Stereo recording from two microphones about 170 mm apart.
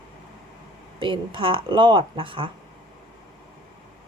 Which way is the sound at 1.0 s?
30° right (ahead or behind).